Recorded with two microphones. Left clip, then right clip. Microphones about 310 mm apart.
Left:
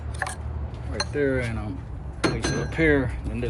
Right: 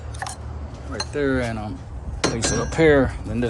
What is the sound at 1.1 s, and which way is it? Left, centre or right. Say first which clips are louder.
Speech: right 3 dB; centre.